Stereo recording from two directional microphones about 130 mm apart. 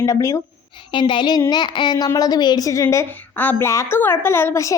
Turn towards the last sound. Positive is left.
turn(degrees=25)  # may be behind; listen again after turning